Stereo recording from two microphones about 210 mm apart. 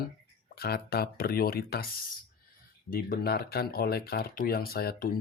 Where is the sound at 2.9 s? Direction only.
45° left (ahead or behind).